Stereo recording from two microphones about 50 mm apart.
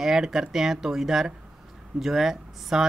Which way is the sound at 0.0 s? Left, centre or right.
Centre.